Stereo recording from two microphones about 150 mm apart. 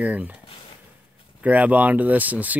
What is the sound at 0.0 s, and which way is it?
Speech, 10° right (ahead or behind).